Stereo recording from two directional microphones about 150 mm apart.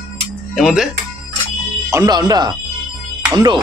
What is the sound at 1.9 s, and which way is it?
Speech, 25° right (ahead or behind).